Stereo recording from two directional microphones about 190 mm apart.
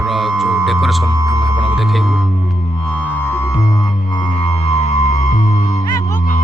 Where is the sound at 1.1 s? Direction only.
15° right (ahead or behind).